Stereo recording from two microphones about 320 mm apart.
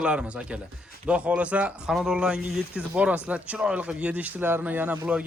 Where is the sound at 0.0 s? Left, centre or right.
Centre.